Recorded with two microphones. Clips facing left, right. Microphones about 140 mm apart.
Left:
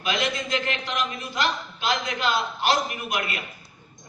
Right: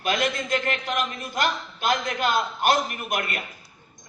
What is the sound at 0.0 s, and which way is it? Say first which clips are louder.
A man's voice: right 2 dB; 50° right (ahead or behind).